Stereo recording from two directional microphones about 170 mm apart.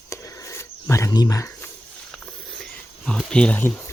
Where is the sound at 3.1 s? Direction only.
5° left (ahead or behind).